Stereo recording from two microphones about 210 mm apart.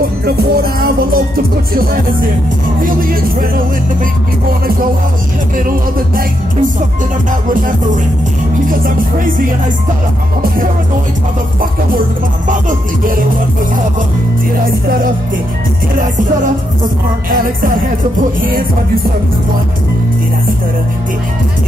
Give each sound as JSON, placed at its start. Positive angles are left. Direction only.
{"t": 0.2, "sound": "music", "side_deg": -45}
{"t": 7.4, "sound": "music", "side_deg": -40}
{"t": 12.4, "sound": "music", "side_deg": -40}